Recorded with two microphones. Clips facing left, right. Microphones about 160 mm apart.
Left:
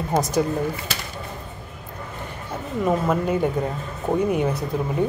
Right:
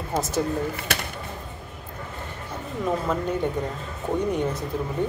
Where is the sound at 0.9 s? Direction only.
60° right (ahead or behind).